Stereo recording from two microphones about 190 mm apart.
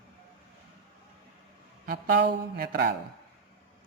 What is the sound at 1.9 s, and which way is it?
Speech, 60° right (ahead or behind).